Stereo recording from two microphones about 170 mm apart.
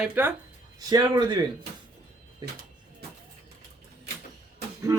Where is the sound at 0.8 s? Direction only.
20° right (ahead or behind).